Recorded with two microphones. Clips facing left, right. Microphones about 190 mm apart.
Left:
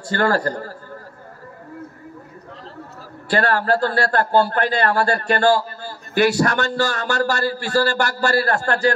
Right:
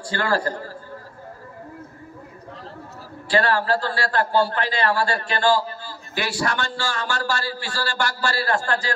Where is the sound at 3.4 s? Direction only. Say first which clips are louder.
Left 3 dB; 50° left (ahead or behind).